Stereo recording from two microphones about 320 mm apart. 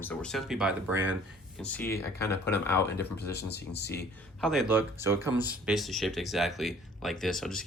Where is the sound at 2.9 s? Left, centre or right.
Left.